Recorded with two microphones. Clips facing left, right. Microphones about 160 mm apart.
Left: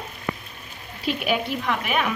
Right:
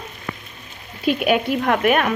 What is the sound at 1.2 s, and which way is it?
Frying, 60° right (ahead or behind).